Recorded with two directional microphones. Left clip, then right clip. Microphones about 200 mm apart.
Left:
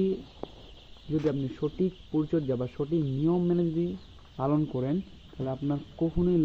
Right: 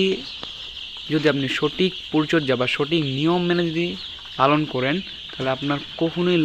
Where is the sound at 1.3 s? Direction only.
35° right (ahead or behind).